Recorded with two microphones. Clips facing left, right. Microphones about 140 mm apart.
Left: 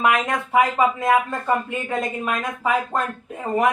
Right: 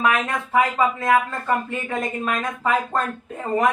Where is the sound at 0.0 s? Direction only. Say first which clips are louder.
Left 1 dB; 15° left (ahead or behind).